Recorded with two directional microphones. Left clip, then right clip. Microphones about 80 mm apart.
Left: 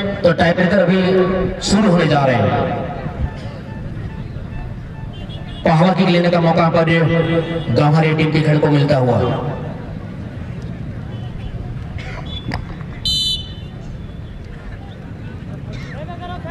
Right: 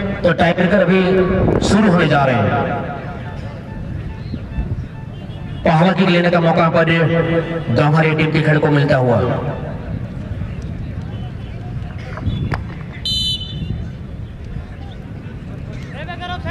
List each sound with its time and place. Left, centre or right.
0.2 s a man's voice: centre
5.6 s a man's voice: centre
7.7 s a man's voice: centre
13.0 s a sound: centre